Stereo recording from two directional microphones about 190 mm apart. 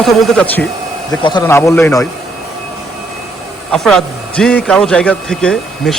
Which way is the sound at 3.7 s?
Centre (ahead or behind).